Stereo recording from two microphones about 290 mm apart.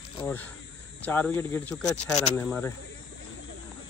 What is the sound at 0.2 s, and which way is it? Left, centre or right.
Speech, centre.